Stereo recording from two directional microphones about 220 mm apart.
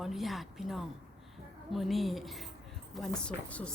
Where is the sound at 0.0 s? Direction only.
Centre (ahead or behind).